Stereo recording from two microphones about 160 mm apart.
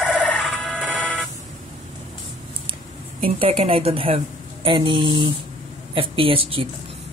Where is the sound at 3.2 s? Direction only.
35° right (ahead or behind).